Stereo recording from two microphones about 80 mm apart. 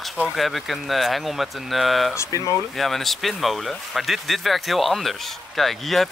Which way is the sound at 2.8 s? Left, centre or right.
Centre.